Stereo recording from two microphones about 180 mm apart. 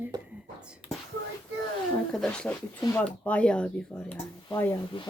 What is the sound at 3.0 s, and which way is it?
Speech, 5° left (ahead or behind).